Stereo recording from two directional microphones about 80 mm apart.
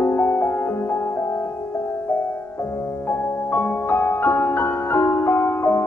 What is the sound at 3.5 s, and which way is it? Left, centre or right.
Music, left.